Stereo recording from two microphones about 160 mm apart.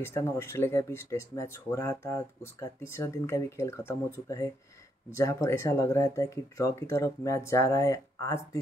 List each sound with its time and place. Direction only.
0.0 s speech: 15° left (ahead or behind)